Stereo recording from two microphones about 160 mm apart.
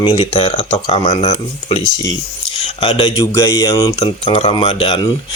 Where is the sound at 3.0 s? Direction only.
20° left (ahead or behind).